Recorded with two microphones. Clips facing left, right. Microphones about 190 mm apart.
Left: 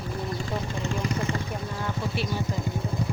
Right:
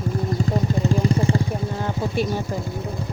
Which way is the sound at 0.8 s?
30° right (ahead or behind).